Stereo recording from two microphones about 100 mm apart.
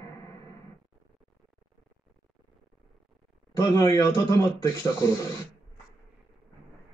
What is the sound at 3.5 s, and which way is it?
Speech, 30° left (ahead or behind).